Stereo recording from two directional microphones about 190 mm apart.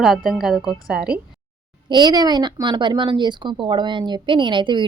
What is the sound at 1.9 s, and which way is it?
A woman's voice, 20° right (ahead or behind).